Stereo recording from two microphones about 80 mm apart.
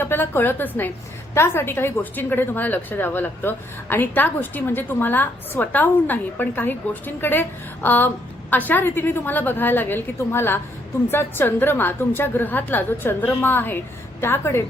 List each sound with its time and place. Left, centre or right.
0.0 s a woman's voice: left